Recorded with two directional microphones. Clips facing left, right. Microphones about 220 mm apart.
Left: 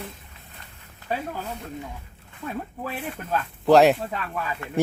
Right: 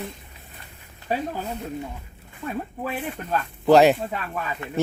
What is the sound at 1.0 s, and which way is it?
Speech, 10° right (ahead or behind).